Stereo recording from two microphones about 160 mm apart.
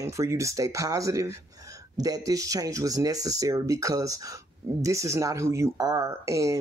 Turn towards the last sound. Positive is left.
turn(degrees=-20)  # may be behind; listen again after turning